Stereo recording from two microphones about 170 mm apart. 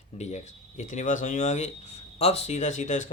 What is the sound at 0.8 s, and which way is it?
Speech, 45° left (ahead or behind).